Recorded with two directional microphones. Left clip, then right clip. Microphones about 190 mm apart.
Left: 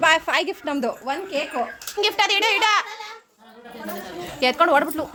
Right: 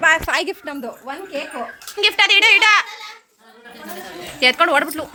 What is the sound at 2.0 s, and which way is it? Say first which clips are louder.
Speech: right 6 dB; centre (ahead or behind).